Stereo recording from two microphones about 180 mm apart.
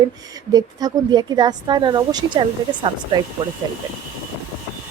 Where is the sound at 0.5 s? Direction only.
20° right (ahead or behind).